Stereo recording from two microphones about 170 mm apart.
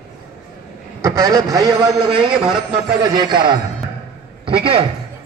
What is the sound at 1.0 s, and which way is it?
A man's voice, 20° right (ahead or behind).